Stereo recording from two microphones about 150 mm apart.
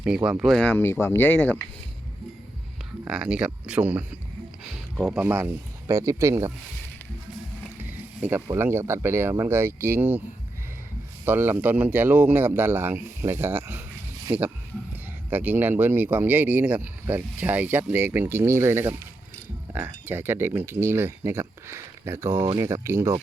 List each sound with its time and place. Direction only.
0.3 s speech: centre (ahead or behind)
0.7 s speech: 15° left (ahead or behind)
3.1 s speech: 5° right (ahead or behind)
7.8 s a sound: 10° right (ahead or behind)
8.5 s speech: 15° right (ahead or behind)
11.3 s speech: 15° right (ahead or behind)
20.1 s speech: 15° right (ahead or behind)